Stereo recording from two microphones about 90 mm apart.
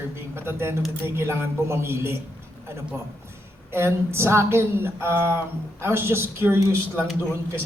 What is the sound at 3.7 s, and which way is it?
A man's voice, 30° right (ahead or behind).